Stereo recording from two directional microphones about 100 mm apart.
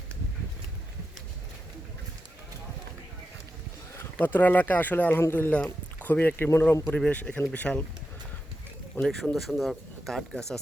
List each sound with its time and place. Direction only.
3.9 s speech: 20° left (ahead or behind)
9.0 s speech: 5° left (ahead or behind)